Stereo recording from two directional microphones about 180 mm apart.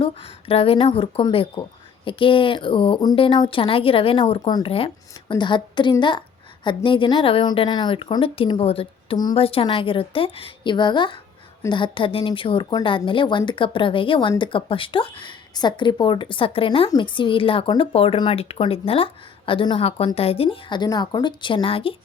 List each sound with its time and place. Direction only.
0.0 s a woman's voice: 30° left (ahead or behind)